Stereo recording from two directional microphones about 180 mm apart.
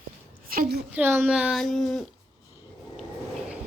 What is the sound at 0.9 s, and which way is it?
Speech, 10° right (ahead or behind).